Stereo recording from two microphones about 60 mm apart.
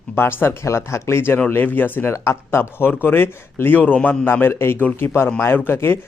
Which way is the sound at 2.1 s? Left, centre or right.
Left.